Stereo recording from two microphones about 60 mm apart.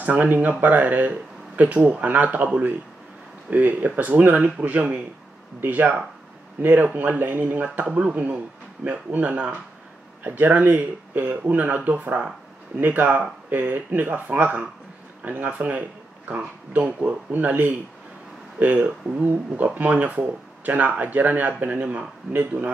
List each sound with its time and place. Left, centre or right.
0.0 s speech: right